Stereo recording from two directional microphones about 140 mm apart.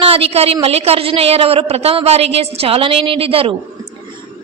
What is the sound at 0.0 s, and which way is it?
A woman's voice, 45° right (ahead or behind).